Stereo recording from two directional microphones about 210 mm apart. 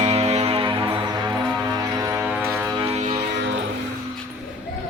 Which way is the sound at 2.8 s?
30° right (ahead or behind).